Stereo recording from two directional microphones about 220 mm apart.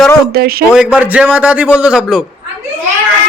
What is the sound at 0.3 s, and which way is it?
Speech, 45° right (ahead or behind).